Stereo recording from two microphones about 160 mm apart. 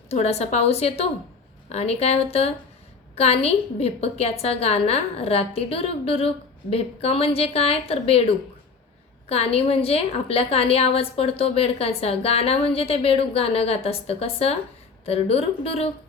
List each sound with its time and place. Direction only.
0.1 s a woman's voice: 40° left (ahead or behind)